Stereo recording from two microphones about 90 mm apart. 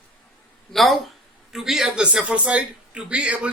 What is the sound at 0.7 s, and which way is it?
Speech, centre (ahead or behind).